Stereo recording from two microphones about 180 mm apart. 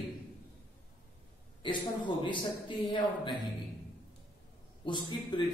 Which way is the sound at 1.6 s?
25° left (ahead or behind).